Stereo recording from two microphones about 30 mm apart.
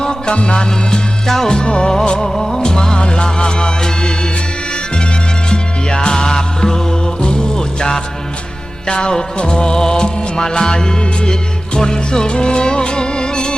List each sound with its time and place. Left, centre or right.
0.0 s music: left
2.2 s music: centre
2.6 s music: left
5.5 s music: left